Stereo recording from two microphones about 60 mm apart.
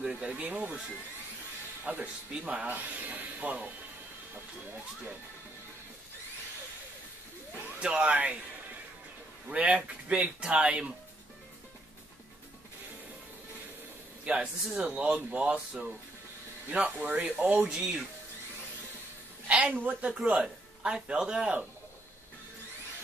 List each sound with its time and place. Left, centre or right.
0.0 s speech: centre
1.9 s speech: right
7.8 s speech: centre
9.5 s a man's voice: right
14.2 s a man's voice: centre
14.9 s a man's voice: right
16.7 s speech: right
19.4 s a sound: right
19.7 s speech: right
20.1 s a man's voice: centre